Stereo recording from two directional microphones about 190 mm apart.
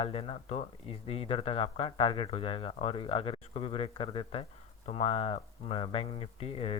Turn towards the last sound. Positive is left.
turn(degrees=30)  # may be behind; listen again after turning